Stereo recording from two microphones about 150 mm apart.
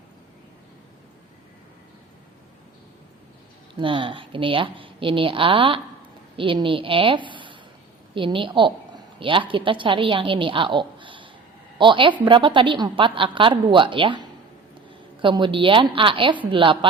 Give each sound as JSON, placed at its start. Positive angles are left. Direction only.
{"t": 3.8, "sound": "a woman's voice", "side_deg": -35}